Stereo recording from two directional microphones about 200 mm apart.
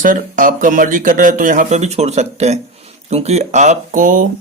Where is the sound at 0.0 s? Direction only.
40° right (ahead or behind).